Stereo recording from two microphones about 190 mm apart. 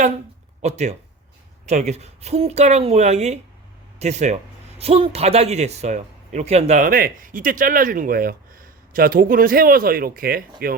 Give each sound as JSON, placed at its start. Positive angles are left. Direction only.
{"t": 0.6, "sound": "speech", "side_deg": -35}